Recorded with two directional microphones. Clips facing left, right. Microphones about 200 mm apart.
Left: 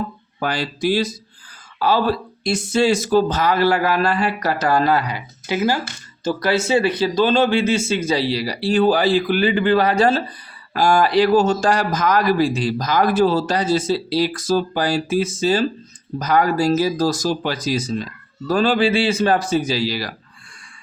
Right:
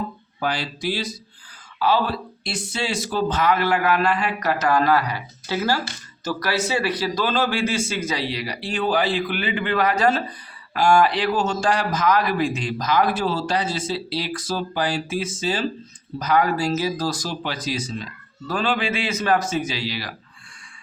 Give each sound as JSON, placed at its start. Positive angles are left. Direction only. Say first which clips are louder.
{"t": 0.3, "sound": "a man's voice", "louder": "left 3 dB", "side_deg": 50}